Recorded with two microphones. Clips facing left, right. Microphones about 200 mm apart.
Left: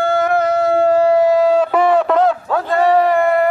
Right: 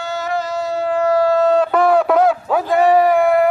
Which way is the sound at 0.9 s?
30° left (ahead or behind).